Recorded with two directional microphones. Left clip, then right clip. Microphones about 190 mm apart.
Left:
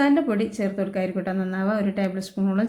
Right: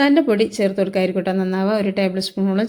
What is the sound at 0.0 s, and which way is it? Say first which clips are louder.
A woman's voice: right 6 dB; 25° right (ahead or behind).